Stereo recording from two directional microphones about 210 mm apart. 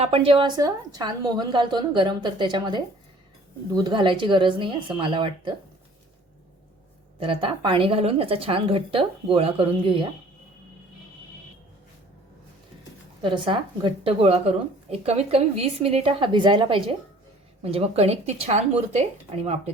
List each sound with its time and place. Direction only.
0.0 s a woman's voice: 25° right (ahead or behind)
7.2 s a woman's voice: 25° right (ahead or behind)
13.2 s a woman's voice: 20° right (ahead or behind)